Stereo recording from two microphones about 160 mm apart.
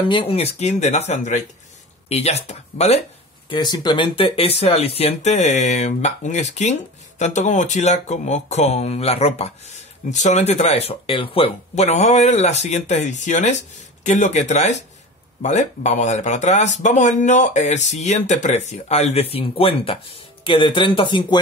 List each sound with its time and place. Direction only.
0.1 s speech: 35° left (ahead or behind)
3.4 s speech: 30° left (ahead or behind)